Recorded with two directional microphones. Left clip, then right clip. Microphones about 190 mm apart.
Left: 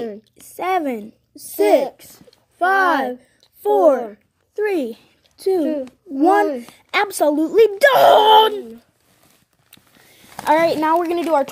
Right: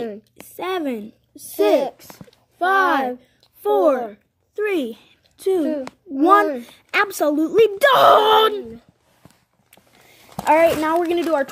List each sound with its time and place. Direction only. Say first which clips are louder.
0.0 s a woman's voice: left 1 dB; 5° left (ahead or behind)
3.2 s a sound: left 1 dB; centre (ahead or behind)
4.8 s a woman's voice: left 2 dB; centre (ahead or behind)
10.4 s speech: even; 20° left (ahead or behind)